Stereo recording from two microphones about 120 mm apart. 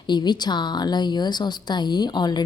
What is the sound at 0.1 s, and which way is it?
A woman's voice, 35° left (ahead or behind).